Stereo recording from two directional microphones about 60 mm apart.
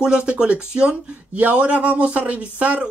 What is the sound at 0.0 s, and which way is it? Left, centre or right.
Speech, centre.